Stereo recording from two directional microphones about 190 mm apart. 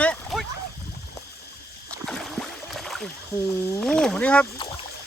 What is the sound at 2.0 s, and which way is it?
Boat, centre (ahead or behind).